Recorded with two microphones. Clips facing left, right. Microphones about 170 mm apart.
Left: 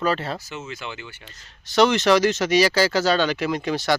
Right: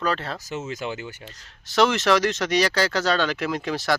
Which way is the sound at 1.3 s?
Centre (ahead or behind).